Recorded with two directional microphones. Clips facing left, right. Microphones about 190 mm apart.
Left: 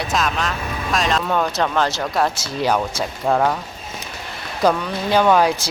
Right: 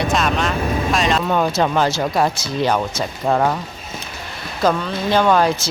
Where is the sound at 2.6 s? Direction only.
10° left (ahead or behind).